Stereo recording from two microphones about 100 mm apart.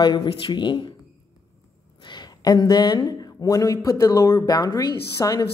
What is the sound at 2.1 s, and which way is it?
A woman's voice, 45° left (ahead or behind).